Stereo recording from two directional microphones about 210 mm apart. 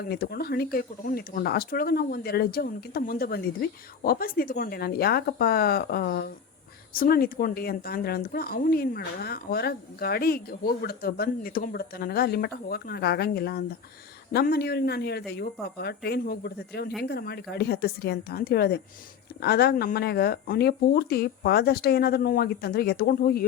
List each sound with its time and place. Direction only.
0.0 s a woman's voice: 45° left (ahead or behind)